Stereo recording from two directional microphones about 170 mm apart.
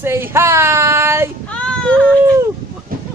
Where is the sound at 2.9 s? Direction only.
55° right (ahead or behind).